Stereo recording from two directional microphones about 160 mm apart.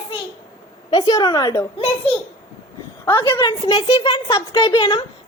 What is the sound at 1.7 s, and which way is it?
Speech, 40° left (ahead or behind).